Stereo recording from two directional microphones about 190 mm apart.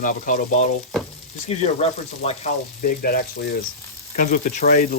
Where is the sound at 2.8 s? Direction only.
50° left (ahead or behind).